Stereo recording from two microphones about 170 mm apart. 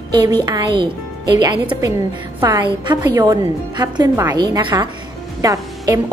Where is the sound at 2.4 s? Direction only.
25° right (ahead or behind).